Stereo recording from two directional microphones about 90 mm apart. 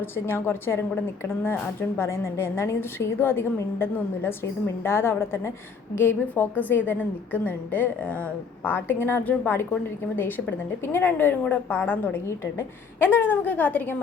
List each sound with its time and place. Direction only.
0.0 s a woman's voice: 25° left (ahead or behind)
2.0 s a woman's voice: 30° left (ahead or behind)